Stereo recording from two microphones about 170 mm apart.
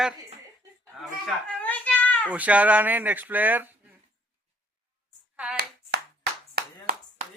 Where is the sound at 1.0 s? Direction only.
5° left (ahead or behind).